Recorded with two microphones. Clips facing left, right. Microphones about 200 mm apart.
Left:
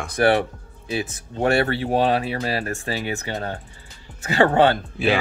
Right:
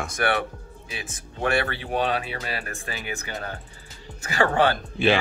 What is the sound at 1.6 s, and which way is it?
Speech, 35° left (ahead or behind).